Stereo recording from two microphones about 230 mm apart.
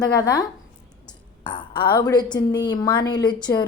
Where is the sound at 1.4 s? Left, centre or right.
Left.